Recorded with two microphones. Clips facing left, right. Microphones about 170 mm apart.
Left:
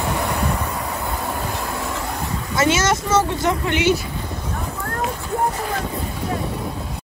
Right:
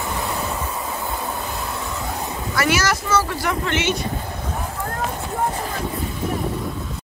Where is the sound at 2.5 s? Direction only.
20° left (ahead or behind).